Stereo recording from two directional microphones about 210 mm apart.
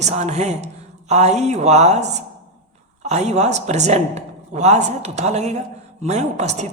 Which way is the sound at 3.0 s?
30° right (ahead or behind).